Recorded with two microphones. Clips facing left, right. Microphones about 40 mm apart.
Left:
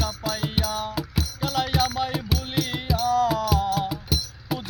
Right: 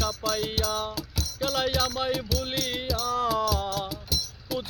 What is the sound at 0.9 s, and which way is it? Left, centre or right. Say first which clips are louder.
Music: left 6 dB; centre.